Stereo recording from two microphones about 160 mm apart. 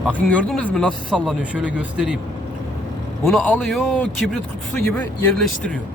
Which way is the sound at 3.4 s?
10° left (ahead or behind).